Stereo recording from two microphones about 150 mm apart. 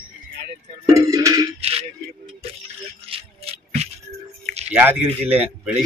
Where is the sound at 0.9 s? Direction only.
20° right (ahead or behind).